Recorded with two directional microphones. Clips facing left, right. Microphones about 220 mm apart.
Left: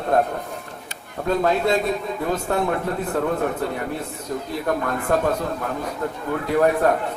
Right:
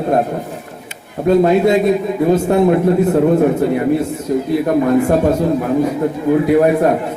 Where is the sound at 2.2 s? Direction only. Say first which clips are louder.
Right 11 dB; 20° right (ahead or behind).